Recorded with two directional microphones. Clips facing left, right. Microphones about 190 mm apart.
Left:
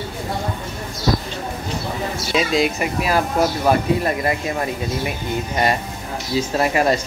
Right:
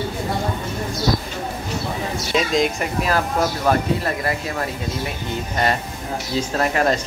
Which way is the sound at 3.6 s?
20° left (ahead or behind).